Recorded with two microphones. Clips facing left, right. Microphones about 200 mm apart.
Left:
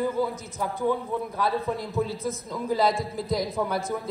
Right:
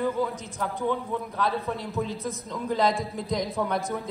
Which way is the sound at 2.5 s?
5° left (ahead or behind).